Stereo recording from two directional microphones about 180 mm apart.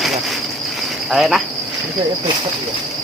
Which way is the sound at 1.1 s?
Centre (ahead or behind).